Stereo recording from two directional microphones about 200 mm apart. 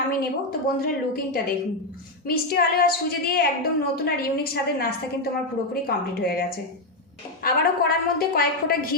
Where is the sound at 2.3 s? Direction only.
50° left (ahead or behind).